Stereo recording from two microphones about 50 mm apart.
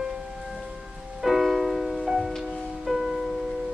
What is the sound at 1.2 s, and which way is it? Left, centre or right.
Music, centre.